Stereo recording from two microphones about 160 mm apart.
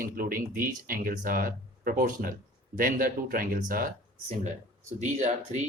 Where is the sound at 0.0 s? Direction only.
60° right (ahead or behind).